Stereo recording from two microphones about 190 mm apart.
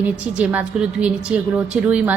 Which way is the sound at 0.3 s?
5° right (ahead or behind).